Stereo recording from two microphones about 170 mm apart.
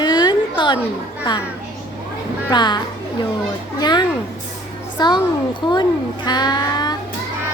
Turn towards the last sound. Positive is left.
turn(degrees=25)  # may be behind; listen again after turning